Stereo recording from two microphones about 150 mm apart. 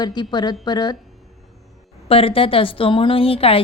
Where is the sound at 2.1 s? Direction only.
40° left (ahead or behind).